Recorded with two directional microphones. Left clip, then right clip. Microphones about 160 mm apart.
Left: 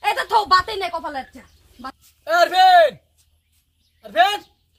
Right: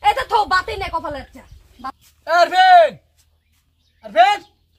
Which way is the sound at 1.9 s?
10° left (ahead or behind).